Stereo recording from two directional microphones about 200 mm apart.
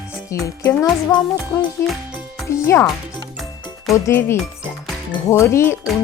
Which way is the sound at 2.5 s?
10° left (ahead or behind).